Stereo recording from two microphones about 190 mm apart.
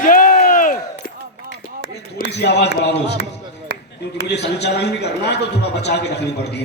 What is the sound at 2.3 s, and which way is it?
Speech, 60° left (ahead or behind).